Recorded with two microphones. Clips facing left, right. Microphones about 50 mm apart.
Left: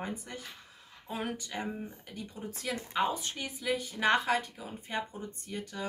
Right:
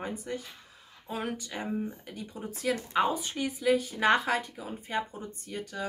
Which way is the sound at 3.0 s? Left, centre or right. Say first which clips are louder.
Right 2 dB; centre.